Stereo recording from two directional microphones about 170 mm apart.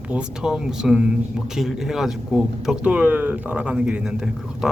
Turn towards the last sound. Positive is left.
turn(degrees=-5)  # may be behind; listen again after turning